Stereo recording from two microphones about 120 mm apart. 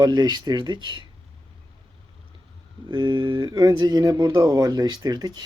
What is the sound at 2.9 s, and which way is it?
Speech, 40° right (ahead or behind).